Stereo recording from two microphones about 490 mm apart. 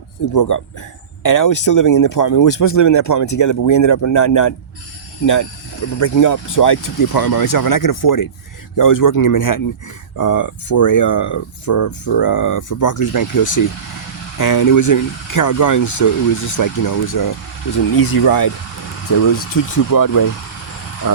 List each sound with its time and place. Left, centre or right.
0.3 s speech: left
19.9 s speech: left